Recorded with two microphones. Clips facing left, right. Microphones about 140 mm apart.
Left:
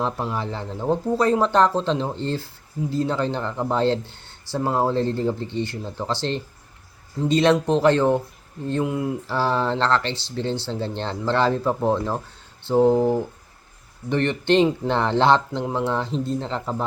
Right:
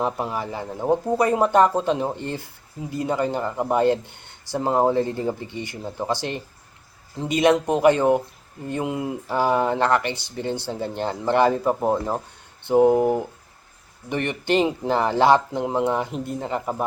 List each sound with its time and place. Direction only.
0.0 s speech: 10° right (ahead or behind)